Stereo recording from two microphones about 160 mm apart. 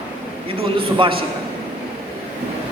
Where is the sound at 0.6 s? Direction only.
30° right (ahead or behind).